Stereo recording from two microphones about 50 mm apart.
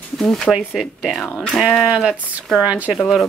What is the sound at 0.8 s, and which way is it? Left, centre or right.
Speech, centre.